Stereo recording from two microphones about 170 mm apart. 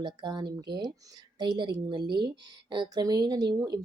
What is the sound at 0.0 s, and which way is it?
Speech, 25° right (ahead or behind).